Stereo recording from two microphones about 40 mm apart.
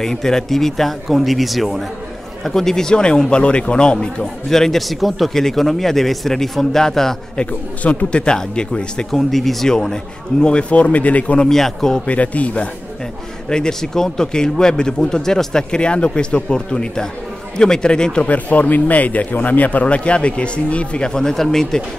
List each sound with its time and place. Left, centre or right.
0.0 s speech: centre
2.4 s speech: centre
4.5 s speech: centre
7.3 s speech: left
9.1 s speech: centre
9.7 s speech: centre
10.4 s speech: left
11.4 s speech: centre
12.1 s speech: left
13.5 s speech: centre
15.7 s speech: left
18.2 s speech: left
19.9 s speech: left
21.1 s speech: centre